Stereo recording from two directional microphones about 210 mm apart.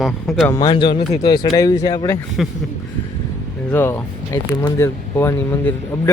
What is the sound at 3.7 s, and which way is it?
Speech, 10° left (ahead or behind).